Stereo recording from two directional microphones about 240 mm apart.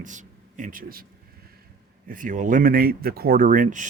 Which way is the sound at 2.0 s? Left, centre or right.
Right.